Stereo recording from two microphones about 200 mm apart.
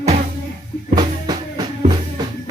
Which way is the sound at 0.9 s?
20° right (ahead or behind).